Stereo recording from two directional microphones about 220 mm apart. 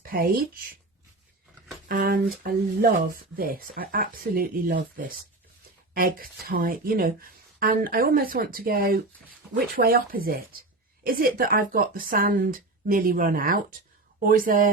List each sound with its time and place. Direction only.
0.0 s speech: 40° right (ahead or behind)
1.9 s speech: 40° right (ahead or behind)
5.9 s speech: 40° right (ahead or behind)